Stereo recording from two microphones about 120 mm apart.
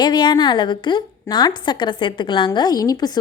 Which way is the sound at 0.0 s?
40° left (ahead or behind).